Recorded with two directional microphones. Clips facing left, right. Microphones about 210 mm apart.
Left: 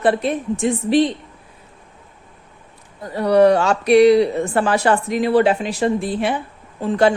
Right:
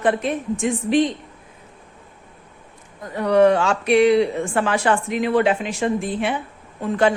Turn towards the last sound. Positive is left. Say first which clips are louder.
# left 3 dB
turn(degrees=30)  # may be behind; listen again after turning